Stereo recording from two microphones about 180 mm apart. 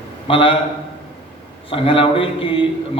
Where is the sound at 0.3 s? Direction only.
30° left (ahead or behind).